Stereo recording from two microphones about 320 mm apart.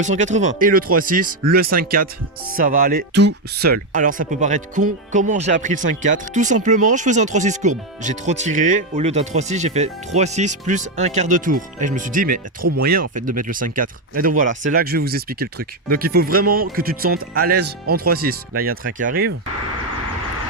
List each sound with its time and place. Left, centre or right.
0.0 s speech: right